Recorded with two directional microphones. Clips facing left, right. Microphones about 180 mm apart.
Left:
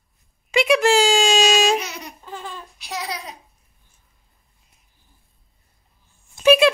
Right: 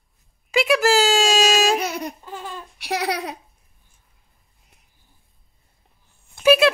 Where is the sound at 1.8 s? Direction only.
55° right (ahead or behind).